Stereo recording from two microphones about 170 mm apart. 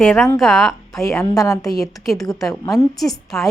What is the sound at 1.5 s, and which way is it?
Speech, 20° left (ahead or behind).